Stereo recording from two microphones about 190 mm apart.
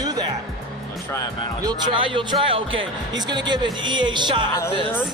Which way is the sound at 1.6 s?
25° right (ahead or behind).